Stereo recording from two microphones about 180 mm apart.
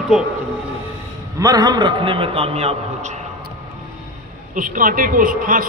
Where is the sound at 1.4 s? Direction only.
20° right (ahead or behind); by 3.1 s 35° right (ahead or behind).